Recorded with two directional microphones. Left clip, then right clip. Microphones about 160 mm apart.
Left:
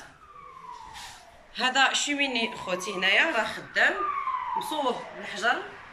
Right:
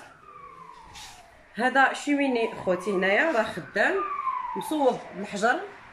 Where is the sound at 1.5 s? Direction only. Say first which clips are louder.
Right 1 dB; 40° right (ahead or behind).